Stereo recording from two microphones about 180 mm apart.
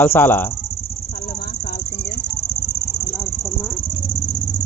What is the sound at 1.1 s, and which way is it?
Cricket, 60° left (ahead or behind).